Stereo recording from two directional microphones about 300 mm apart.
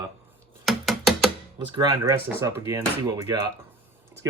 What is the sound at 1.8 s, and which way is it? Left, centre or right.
Speech, centre.